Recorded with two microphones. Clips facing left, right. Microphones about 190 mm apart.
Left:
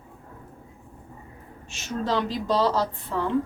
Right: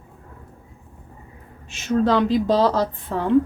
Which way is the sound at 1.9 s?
50° right (ahead or behind).